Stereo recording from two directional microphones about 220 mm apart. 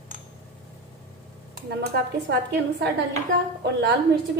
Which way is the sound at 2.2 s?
50° right (ahead or behind).